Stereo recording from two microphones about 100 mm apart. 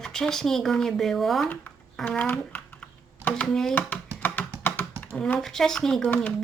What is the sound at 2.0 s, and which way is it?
Computer keyboard, 15° left (ahead or behind).